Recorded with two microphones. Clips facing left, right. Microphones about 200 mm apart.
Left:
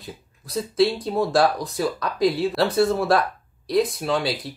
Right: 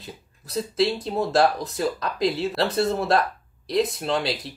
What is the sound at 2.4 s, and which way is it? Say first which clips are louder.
Speech: left 3 dB; centre (ahead or behind).